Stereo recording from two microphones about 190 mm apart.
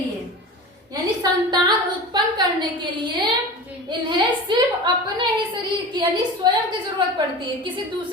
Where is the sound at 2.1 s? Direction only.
25° right (ahead or behind).